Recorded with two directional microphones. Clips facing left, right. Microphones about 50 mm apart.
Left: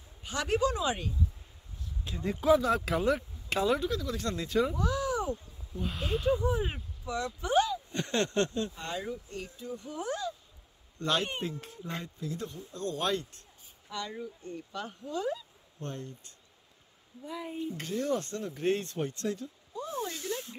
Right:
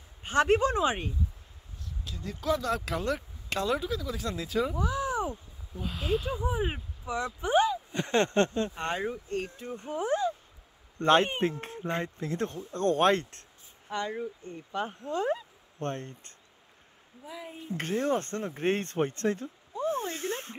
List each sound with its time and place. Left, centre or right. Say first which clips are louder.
0.2 s speech: right 5 dB; right
2.0 s speech: left 4 dB; left
2.5 s speech: left 4 dB; centre
4.7 s a sound: right 1 dB; centre
5.8 s speech: right 3 dB; centre
6.4 s speech: even; centre
8.7 s speech: right 5 dB; right
13.9 s speech: right 5 dB; right
15.0 s speech: right 2 dB; right
17.3 s speech: left 3 dB; centre
17.7 s speech: right 5 dB; right
19.7 s a sound: right 5 dB; right